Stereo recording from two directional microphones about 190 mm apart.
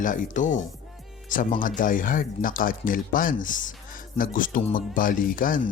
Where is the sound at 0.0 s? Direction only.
45° left (ahead or behind).